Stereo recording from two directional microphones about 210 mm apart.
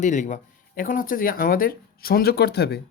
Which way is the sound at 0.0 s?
35° left (ahead or behind).